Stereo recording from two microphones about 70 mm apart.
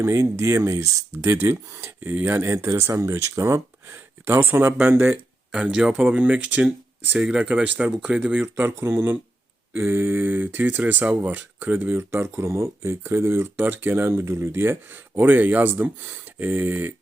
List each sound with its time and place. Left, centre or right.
0.0 s speech: right
2.6 s speech: right
5.5 s speech: centre